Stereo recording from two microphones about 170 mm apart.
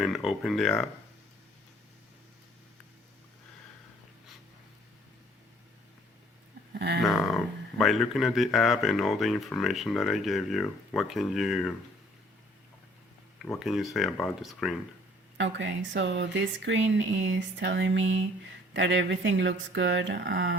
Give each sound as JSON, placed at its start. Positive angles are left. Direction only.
{"t": 0.0, "sound": "speech", "side_deg": 0}
{"t": 6.7, "sound": "a sound", "side_deg": -80}
{"t": 7.0, "sound": "speech", "side_deg": 0}
{"t": 13.4, "sound": "speech", "side_deg": 0}
{"t": 15.4, "sound": "speech", "side_deg": -90}